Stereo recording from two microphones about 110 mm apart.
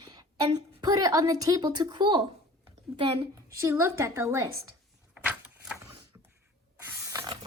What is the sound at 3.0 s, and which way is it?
Speech, 55° right (ahead or behind).